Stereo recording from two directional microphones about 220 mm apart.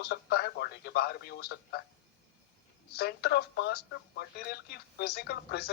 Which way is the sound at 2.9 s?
45° left (ahead or behind).